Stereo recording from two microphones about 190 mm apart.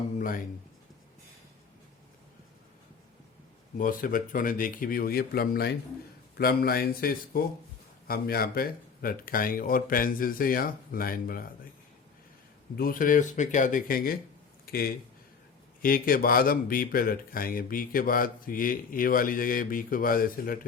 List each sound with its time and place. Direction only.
0.2 s speech: 45° left (ahead or behind)
3.8 s a man's voice: 45° left (ahead or behind)
12.7 s a man's voice: 50° left (ahead or behind)